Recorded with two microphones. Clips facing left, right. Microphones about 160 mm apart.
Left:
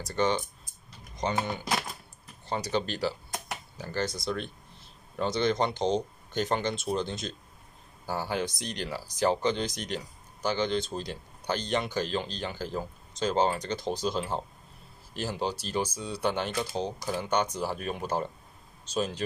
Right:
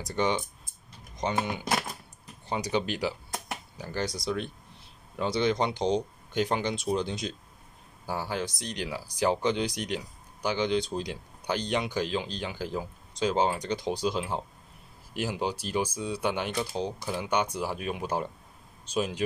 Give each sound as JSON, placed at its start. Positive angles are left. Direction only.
{"t": 0.0, "sound": "speech", "side_deg": -15}
{"t": 2.5, "sound": "speech", "side_deg": -10}